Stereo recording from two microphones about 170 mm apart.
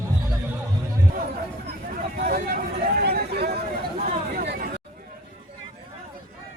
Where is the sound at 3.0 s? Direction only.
70° right (ahead or behind).